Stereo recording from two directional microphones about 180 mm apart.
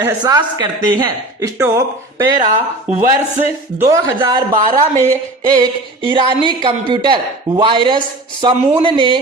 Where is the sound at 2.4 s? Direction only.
40° right (ahead or behind).